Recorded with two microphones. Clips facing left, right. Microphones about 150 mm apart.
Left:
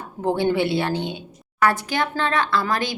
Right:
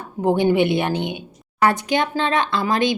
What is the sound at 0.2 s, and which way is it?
A woman's voice, 15° right (ahead or behind).